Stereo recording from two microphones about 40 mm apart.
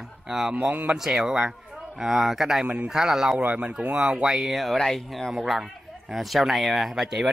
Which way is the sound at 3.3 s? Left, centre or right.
Right.